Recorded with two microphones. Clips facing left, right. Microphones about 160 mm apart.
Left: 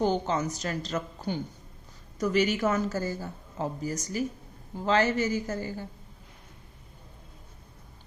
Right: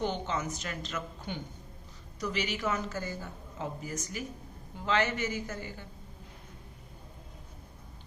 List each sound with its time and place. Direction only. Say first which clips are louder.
0.0 s a woman's voice: left 6 dB; 40° left (ahead or behind)